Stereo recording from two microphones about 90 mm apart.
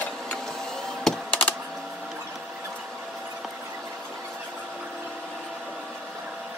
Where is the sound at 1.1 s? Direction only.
5° left (ahead or behind).